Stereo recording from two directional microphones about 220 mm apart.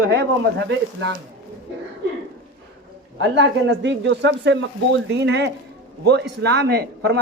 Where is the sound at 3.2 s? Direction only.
55° right (ahead or behind).